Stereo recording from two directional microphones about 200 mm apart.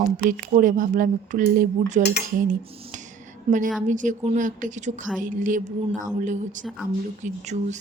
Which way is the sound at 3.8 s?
40° right (ahead or behind).